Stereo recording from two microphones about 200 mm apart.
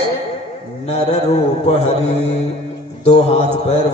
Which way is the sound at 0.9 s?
30° left (ahead or behind).